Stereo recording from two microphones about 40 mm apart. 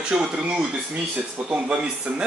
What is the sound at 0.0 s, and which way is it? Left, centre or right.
Speech, right.